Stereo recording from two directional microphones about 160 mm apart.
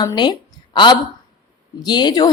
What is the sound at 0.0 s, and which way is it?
A woman's voice, 25° left (ahead or behind).